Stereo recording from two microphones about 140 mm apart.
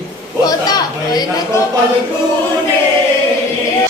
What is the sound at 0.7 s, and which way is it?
Speech, 30° left (ahead or behind).